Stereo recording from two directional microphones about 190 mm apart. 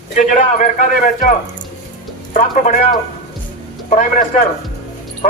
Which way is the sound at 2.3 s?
45° left (ahead or behind).